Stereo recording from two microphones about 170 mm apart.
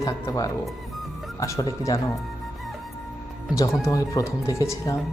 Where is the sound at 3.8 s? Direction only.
20° left (ahead or behind).